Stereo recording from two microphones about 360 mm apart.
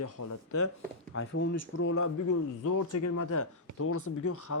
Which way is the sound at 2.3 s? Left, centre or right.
Left.